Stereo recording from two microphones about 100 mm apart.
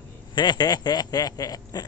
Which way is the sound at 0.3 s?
50° left (ahead or behind).